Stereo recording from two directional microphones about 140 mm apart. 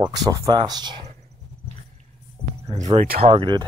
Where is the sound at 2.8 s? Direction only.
50° right (ahead or behind).